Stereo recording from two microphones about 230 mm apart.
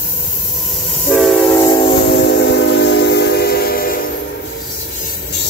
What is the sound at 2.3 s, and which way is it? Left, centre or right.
Train, left.